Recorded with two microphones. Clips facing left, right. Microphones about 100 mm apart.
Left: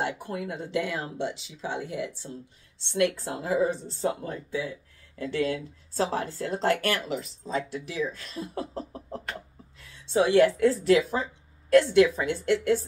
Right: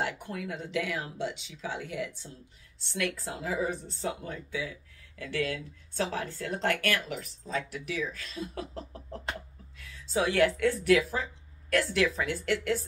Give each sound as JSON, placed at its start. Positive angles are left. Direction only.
{"t": 0.0, "sound": "speech", "side_deg": 20}
{"t": 5.9, "sound": "speech", "side_deg": 35}